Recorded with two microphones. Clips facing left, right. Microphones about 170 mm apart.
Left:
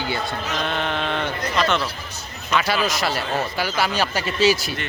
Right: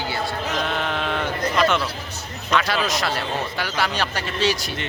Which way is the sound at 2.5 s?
5° left (ahead or behind).